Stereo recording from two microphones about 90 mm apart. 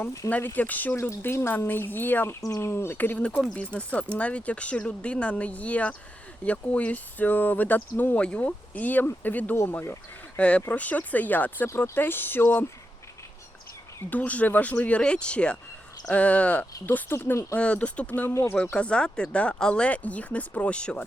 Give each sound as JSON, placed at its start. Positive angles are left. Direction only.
{"t": 0.3, "sound": "speech", "side_deg": 20}
{"t": 10.3, "sound": "speech", "side_deg": 15}
{"t": 14.1, "sound": "speech", "side_deg": 15}
{"t": 17.6, "sound": "speech", "side_deg": 15}